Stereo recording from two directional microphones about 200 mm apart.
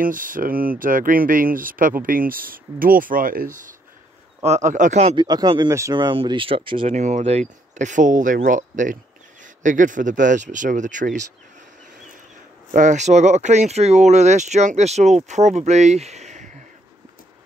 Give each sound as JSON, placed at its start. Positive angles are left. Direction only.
{"t": 0.0, "sound": "speech", "side_deg": -45}
{"t": 5.2, "sound": "speech", "side_deg": -20}
{"t": 12.7, "sound": "speech", "side_deg": -35}